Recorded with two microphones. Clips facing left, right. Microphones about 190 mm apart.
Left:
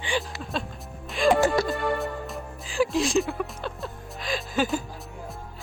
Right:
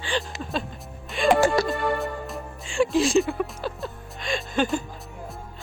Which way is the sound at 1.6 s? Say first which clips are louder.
Right 1 dB; centre (ahead or behind).